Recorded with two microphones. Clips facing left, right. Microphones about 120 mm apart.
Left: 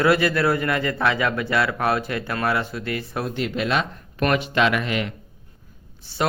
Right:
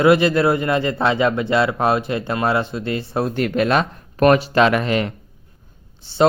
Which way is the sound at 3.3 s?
50° right (ahead or behind).